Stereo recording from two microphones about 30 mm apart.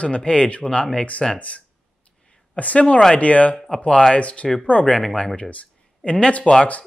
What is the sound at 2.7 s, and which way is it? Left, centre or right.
Speech, left.